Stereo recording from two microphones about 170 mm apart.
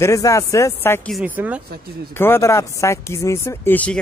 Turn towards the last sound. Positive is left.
turn(degrees=10)  # may be behind; listen again after turning